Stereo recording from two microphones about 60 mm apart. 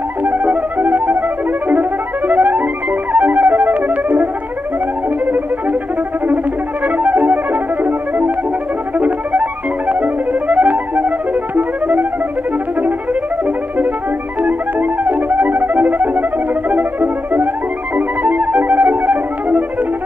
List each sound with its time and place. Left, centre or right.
0.2 s music: right
7.0 s music: right
9.0 s music: right
14.4 s music: right